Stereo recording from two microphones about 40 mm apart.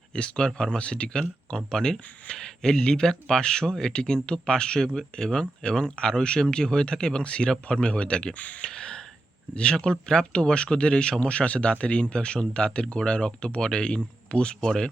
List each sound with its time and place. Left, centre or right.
0.1 s speech: left
8.4 s speech: left
8.6 s gasp: left
9.6 s speech: left